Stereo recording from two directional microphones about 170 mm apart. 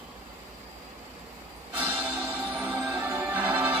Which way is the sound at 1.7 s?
10° right (ahead or behind).